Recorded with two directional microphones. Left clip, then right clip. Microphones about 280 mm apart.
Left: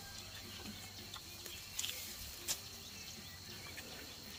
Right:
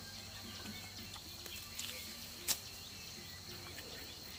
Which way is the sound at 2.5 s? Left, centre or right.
Right.